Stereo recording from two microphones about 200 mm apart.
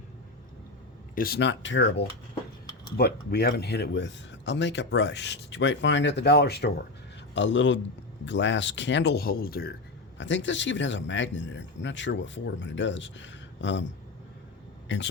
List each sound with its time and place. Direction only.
1.1 s speech: 50° left (ahead or behind); by 2.0 s 65° left (ahead or behind)
3.0 s speech: 55° left (ahead or behind)
7.3 s speech: 65° left (ahead or behind); by 9.7 s 50° left (ahead or behind)
10.2 s speech: 65° left (ahead or behind)
14.9 s speech: 65° left (ahead or behind)